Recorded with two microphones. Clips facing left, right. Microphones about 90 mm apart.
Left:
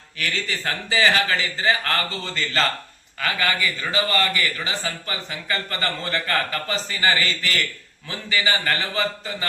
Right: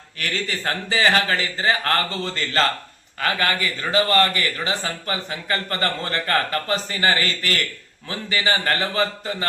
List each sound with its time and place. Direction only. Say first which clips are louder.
0.2 s a man's voice: right 1 dB; 35° right (ahead or behind)